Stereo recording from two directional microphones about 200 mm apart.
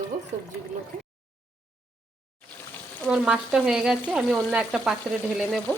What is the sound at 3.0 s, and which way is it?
A woman's voice, 5° right (ahead or behind).